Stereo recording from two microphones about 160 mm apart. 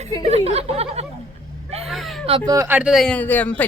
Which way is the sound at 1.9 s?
Centre (ahead or behind).